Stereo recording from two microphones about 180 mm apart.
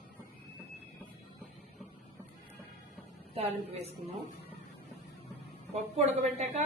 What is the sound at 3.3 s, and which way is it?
Speech, 35° right (ahead or behind).